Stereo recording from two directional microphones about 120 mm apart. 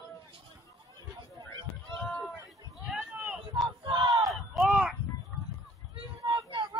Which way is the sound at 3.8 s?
45° right (ahead or behind).